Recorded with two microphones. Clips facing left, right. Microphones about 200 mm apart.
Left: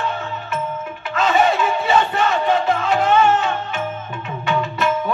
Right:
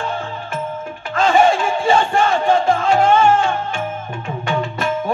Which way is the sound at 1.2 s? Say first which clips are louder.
Right 3 dB; 30° right (ahead or behind).